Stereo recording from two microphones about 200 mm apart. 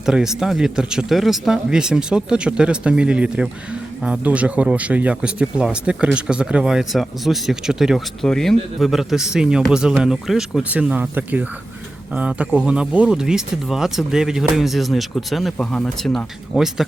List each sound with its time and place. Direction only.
0.0 s speech: 5° right (ahead or behind)